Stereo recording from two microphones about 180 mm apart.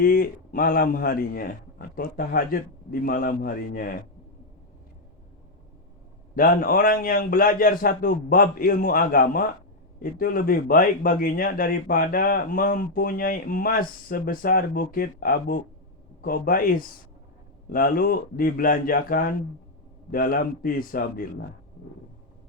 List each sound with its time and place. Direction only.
0.0 s speech: 50° left (ahead or behind)
6.3 s speech: 50° left (ahead or behind)